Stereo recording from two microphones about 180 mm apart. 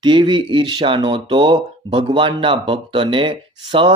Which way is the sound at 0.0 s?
25° right (ahead or behind).